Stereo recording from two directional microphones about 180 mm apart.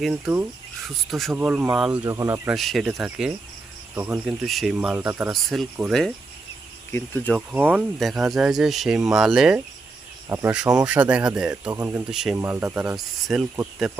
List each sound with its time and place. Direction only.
0.0 s speech: 10° right (ahead or behind)
2.0 s speech: 20° right (ahead or behind)
2.5 s speech: centre (ahead or behind)
5.3 s speech: centre (ahead or behind)
7.3 s speech: 10° right (ahead or behind)
12.1 s speech: centre (ahead or behind)